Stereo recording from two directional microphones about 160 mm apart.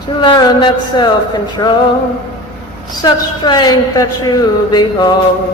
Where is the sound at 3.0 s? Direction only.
25° left (ahead or behind).